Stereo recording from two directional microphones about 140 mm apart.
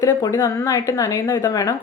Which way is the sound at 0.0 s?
25° left (ahead or behind).